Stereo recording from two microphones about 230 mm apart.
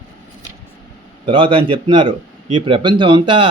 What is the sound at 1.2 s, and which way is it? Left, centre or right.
Speech, right.